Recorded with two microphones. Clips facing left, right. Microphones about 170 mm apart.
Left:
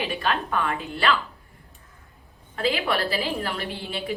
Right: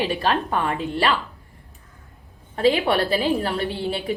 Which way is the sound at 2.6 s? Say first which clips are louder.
Right 6 dB; 35° right (ahead or behind).